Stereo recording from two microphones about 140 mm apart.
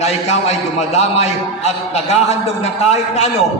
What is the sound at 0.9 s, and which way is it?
A man's voice, 50° left (ahead or behind).